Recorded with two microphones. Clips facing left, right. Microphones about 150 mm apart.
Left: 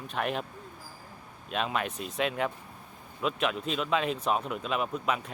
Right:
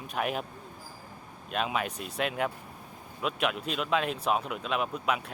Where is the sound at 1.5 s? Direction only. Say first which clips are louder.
Even; centre (ahead or behind).